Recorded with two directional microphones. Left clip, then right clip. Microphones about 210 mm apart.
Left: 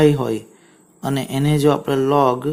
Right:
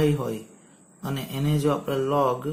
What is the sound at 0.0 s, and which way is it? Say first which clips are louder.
Speech: left 9 dB; 50° left (ahead or behind).